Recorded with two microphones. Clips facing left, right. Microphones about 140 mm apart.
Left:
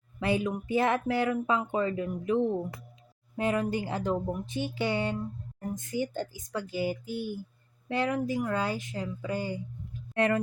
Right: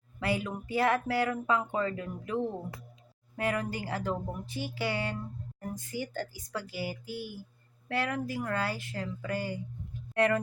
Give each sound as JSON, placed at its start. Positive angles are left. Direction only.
{"t": 0.2, "sound": "speech", "side_deg": 20}